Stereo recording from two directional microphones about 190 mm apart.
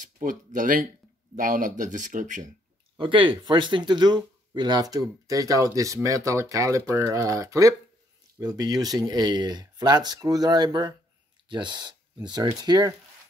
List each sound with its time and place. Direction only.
0.0 s speech: 45° right (ahead or behind)
3.0 s speech: 25° right (ahead or behind)